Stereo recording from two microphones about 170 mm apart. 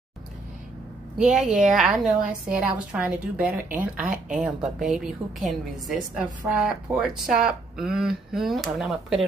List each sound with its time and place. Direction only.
1.1 s speech: 5° right (ahead or behind)